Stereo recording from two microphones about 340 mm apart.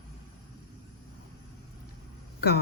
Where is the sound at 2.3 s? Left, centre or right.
Left.